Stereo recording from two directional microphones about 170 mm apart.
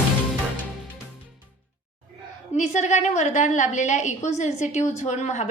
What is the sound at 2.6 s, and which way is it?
A woman's voice, 45° left (ahead or behind).